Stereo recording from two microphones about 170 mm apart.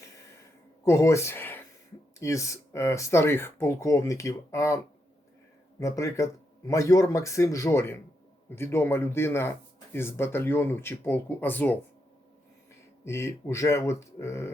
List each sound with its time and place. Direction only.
0.9 s speech: 15° left (ahead or behind)
5.8 s speech: 20° left (ahead or behind)
13.1 s speech: 15° left (ahead or behind)